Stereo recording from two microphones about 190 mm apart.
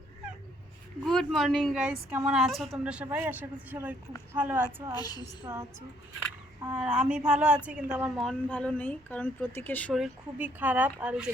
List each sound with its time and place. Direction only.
1.0 s a woman's voice: centre (ahead or behind)
4.9 s a woman's voice: 20° left (ahead or behind)
5.5 s a woman's voice: 15° right (ahead or behind)
6.1 s a sound: 20° right (ahead or behind)
6.7 s speech: 5° right (ahead or behind)